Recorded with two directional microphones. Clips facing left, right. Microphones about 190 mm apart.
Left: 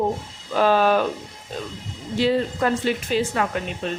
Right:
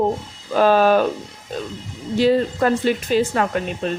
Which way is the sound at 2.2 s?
45° right (ahead or behind).